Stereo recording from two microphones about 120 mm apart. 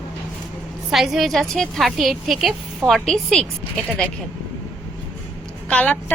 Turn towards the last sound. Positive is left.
turn(degrees=10)  # may be behind; listen again after turning